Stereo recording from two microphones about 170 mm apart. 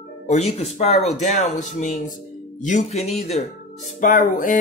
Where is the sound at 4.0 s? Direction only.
50° left (ahead or behind).